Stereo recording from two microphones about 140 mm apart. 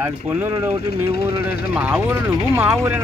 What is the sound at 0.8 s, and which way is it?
Speech, 90° left.